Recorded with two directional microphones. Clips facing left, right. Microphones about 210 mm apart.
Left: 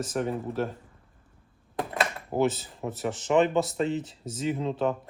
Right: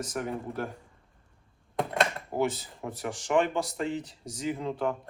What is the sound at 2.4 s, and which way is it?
Speech, 25° left (ahead or behind).